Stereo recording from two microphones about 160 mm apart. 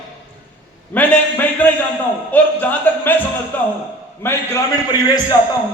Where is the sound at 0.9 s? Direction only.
10° left (ahead or behind).